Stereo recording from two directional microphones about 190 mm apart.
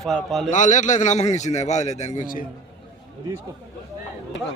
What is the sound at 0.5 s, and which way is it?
A man's voice, 40° left (ahead or behind).